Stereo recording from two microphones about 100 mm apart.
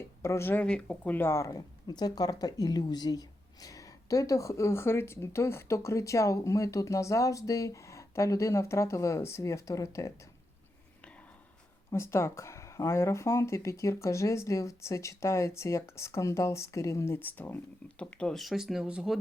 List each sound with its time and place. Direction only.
0.0 s speech: 25° left (ahead or behind)
0.6 s speech: 10° left (ahead or behind); by 10.1 s 30° left (ahead or behind)
11.9 s speech: 25° left (ahead or behind); by 19.2 s 5° right (ahead or behind)